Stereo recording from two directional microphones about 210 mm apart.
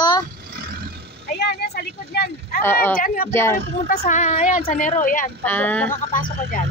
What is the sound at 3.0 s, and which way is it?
Speech, 40° left (ahead or behind).